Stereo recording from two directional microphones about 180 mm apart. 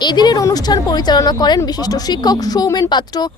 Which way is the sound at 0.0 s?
25° left (ahead or behind).